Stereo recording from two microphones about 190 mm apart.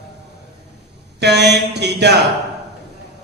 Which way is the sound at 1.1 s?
60° right (ahead or behind).